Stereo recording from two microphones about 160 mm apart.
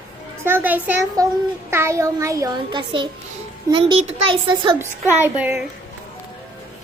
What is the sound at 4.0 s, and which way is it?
Child singing, 40° right (ahead or behind).